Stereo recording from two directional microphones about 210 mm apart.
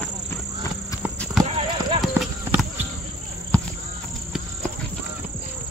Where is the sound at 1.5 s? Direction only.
25° right (ahead or behind).